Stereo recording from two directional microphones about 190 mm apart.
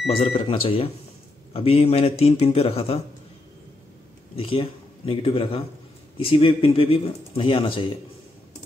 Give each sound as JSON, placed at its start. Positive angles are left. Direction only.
{"t": 0.1, "sound": "speech", "side_deg": 30}
{"t": 4.4, "sound": "speech", "side_deg": 30}